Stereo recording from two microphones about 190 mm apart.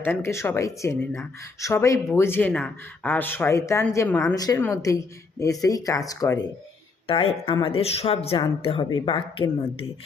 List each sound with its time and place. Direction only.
0.0 s speech: 10° left (ahead or behind)
7.1 s speech: 30° left (ahead or behind)